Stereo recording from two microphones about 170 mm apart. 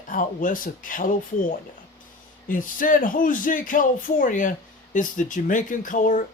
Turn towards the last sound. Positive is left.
turn(degrees=50)  # may be behind; listen again after turning